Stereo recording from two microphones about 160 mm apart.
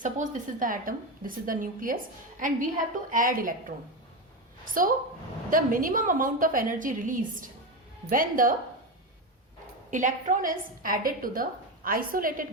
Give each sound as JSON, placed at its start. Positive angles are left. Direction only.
{"t": 0.0, "sound": "a woman's voice", "side_deg": -55}
{"t": 4.6, "sound": "a woman's voice", "side_deg": -60}
{"t": 9.9, "sound": "a woman's voice", "side_deg": -50}